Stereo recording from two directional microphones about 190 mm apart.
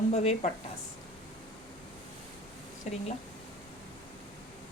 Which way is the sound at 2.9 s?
35° left (ahead or behind).